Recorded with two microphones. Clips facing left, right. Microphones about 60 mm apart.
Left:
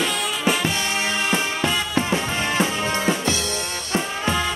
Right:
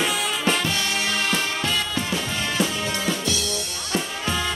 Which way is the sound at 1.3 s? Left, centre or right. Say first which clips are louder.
Left 2 dB; centre.